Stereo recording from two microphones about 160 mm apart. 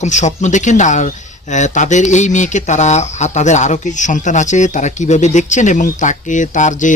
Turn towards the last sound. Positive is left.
turn(degrees=50)  # may be behind; listen again after turning